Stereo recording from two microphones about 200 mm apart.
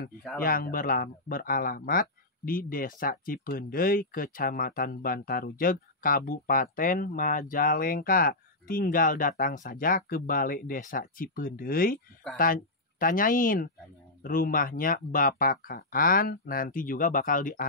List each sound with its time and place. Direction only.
0.4 s speech: 45° left (ahead or behind)